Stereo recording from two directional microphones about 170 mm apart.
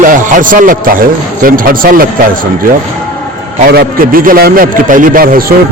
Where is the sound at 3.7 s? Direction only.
60° right (ahead or behind).